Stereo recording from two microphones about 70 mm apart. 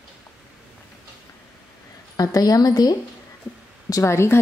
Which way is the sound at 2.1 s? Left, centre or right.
Left.